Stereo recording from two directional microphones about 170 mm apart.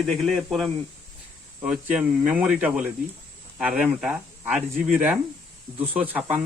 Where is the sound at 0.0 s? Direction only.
Centre (ahead or behind).